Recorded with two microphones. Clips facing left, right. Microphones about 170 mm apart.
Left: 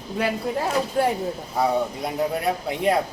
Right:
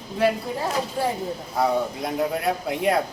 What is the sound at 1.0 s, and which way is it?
Speech, 70° left (ahead or behind).